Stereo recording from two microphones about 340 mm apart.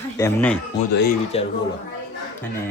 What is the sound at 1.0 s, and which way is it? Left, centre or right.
Speech, left.